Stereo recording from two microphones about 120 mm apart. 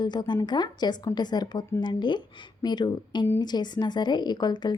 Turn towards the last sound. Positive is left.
turn(degrees=35)  # may be behind; listen again after turning